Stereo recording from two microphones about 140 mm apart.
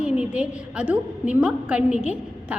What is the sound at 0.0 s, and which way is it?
A woman's voice, 5° right (ahead or behind).